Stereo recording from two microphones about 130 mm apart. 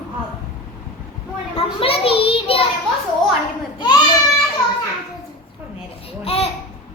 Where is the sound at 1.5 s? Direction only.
45° left (ahead or behind).